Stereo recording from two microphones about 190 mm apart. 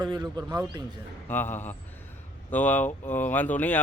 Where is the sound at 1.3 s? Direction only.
10° left (ahead or behind).